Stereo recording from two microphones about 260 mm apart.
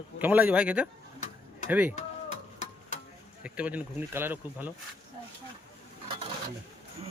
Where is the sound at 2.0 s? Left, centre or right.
Left.